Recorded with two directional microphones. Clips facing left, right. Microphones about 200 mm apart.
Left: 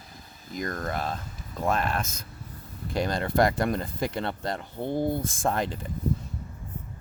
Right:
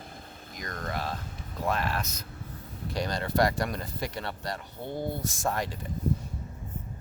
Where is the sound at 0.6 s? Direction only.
50° left (ahead or behind).